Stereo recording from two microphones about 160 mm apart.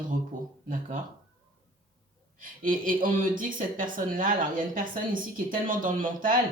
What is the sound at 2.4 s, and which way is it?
A woman's voice, 60° right (ahead or behind).